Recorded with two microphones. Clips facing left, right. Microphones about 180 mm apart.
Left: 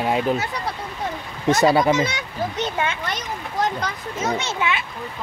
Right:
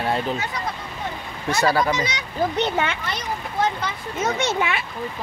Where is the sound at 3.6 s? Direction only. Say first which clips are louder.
Even; 40° left (ahead or behind).